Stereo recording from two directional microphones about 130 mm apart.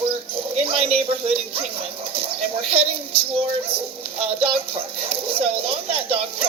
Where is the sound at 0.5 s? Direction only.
45° right (ahead or behind).